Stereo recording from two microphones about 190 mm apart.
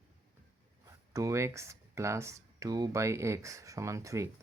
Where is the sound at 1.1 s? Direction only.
15° right (ahead or behind).